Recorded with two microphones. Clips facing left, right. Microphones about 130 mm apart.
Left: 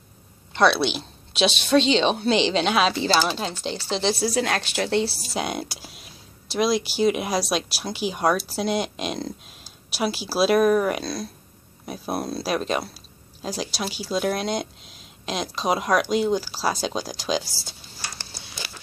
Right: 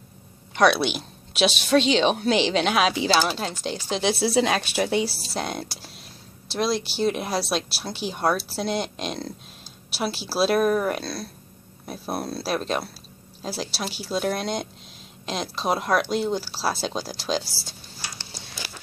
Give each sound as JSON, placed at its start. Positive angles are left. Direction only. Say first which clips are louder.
{"t": 0.6, "sound": "a woman's voice", "louder": "even", "side_deg": -10}
{"t": 4.2, "sound": "a woman's voice", "louder": "right 2 dB", "side_deg": -20}
{"t": 5.3, "sound": "a woman's voice", "louder": "left 2 dB", "side_deg": 5}